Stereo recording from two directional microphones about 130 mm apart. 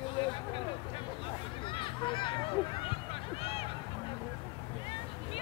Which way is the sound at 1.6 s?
40° left (ahead or behind).